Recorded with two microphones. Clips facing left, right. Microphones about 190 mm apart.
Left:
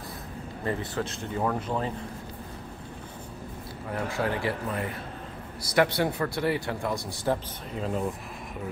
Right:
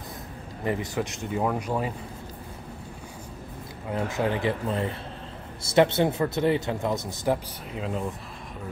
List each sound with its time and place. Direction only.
0.7 s speech: 15° right (ahead or behind)
3.9 s a man's voice: 20° right (ahead or behind)
7.7 s speech: centre (ahead or behind)